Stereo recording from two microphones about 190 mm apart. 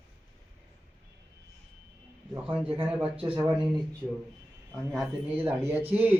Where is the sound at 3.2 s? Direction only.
30° right (ahead or behind).